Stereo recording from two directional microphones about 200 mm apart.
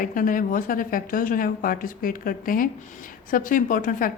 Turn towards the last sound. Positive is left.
turn(degrees=45)  # may be behind; listen again after turning